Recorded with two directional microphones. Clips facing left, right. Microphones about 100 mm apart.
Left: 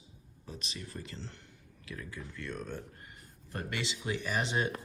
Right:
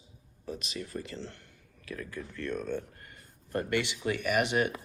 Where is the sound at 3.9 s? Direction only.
25° left (ahead or behind).